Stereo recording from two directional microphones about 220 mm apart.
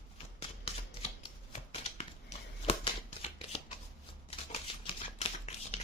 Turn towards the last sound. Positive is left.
turn(degrees=25)  # may be behind; listen again after turning